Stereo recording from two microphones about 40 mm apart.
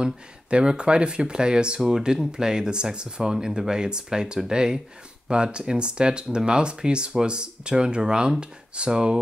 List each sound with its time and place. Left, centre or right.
0.0 s speech: right